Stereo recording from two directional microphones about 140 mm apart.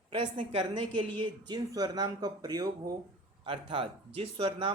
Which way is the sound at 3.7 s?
40° right (ahead or behind).